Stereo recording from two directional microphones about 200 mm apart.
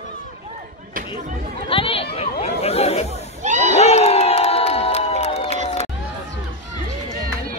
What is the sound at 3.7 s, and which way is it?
Crowd, 30° left (ahead or behind).